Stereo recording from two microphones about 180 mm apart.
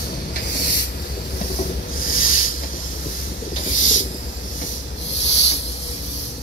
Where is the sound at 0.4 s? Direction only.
70° left (ahead or behind).